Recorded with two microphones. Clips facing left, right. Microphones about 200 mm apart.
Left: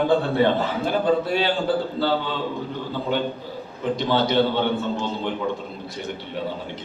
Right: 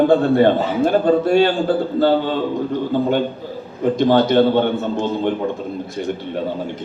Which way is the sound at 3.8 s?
50° right (ahead or behind).